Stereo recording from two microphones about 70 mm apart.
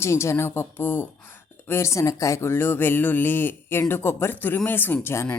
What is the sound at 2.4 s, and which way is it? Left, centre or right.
Speech, left.